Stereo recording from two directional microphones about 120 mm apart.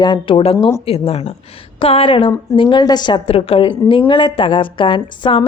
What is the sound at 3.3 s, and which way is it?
A woman's voice, 55° left (ahead or behind).